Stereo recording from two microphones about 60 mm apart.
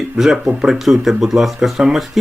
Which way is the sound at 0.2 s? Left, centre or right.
Centre.